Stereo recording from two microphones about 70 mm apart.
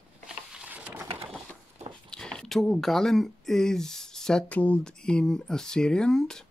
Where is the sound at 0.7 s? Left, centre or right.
Right.